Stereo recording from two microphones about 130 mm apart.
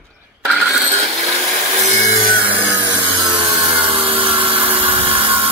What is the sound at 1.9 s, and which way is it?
Music, 65° right (ahead or behind).